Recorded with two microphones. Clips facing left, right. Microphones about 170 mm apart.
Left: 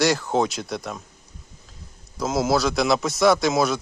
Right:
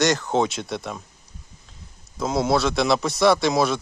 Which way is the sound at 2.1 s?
Centre (ahead or behind).